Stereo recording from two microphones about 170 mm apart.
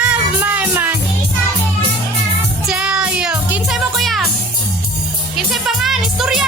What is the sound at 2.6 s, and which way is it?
Music, 5° right (ahead or behind).